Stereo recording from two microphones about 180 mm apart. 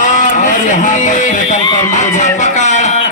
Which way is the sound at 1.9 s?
45° left (ahead or behind).